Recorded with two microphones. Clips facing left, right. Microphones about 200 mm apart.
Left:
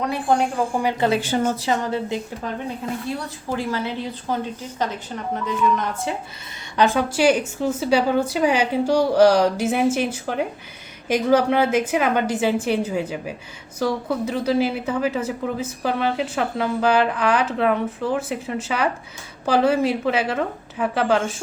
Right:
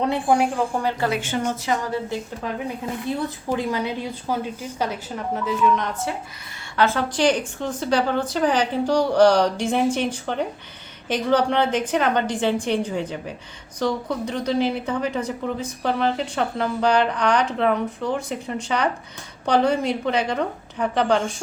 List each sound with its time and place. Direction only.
0.3 s a woman's voice: 5° right (ahead or behind)
0.8 s a woman's voice: 15° left (ahead or behind)
1.2 s a woman's voice: 35° left (ahead or behind)
2.1 s a woman's voice: 20° left (ahead or behind)
3.1 s a woman's voice: 20° right (ahead or behind); by 5.9 s centre (ahead or behind)
6.7 s a woman's voice: 15° left (ahead or behind)